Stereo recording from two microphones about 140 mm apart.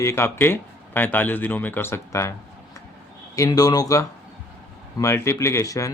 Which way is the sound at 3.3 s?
25° left (ahead or behind).